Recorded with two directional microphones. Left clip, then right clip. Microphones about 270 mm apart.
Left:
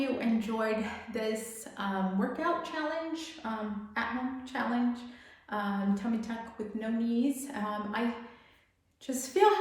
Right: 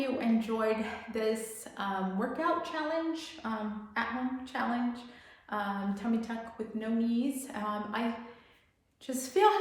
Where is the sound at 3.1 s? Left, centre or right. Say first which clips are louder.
Right 1 dB; centre.